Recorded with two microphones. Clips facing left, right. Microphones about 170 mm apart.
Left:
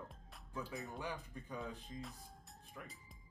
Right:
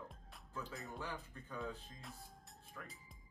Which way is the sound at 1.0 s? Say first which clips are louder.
Left 2 dB; 15° left (ahead or behind).